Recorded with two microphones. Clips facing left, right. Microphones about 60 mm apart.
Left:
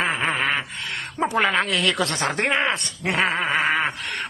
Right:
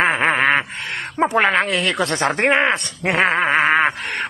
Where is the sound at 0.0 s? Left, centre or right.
Right.